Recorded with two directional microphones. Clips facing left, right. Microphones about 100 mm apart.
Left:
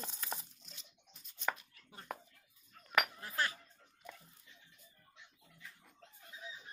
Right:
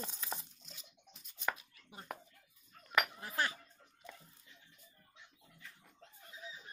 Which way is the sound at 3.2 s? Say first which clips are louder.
Right 1 dB; 20° right (ahead or behind).